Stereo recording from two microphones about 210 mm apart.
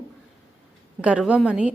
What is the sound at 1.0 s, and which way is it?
Speech, 5° right (ahead or behind).